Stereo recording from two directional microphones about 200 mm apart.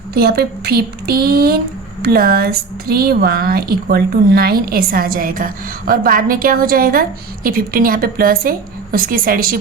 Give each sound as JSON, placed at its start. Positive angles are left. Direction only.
{"t": 0.1, "sound": "speech", "side_deg": -50}